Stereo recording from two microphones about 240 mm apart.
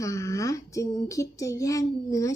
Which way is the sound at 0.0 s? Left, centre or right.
Centre.